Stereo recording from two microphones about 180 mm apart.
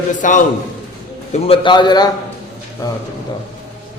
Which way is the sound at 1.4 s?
30° left (ahead or behind).